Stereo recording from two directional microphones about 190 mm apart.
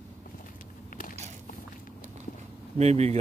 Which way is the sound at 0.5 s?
45° left (ahead or behind).